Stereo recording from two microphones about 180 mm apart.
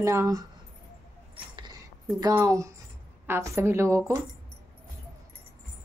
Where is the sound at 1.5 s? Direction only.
25° right (ahead or behind).